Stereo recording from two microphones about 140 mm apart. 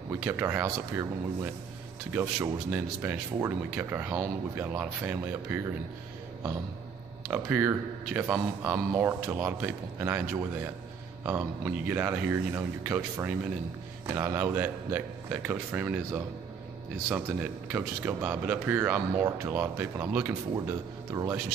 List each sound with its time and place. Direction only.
0.1 s speech: 15° right (ahead or behind)
7.2 s speech: 10° right (ahead or behind)
20.5 s speech: 25° right (ahead or behind)